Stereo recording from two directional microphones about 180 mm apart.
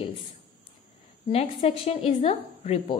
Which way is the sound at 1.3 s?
35° left (ahead or behind).